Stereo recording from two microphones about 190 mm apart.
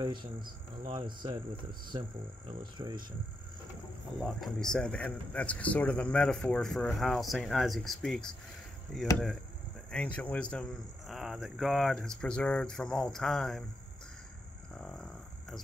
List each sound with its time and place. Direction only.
0.0 s speech: 25° right (ahead or behind)
4.2 s speech: centre (ahead or behind)
10.1 s speech: 5° left (ahead or behind)
14.8 s a sound: 5° left (ahead or behind)